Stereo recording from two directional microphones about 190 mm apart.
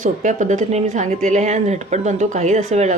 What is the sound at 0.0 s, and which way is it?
Speech, 40° right (ahead or behind).